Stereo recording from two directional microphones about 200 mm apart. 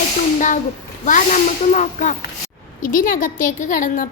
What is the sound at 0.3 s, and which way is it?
A woman's voice, 40° left (ahead or behind).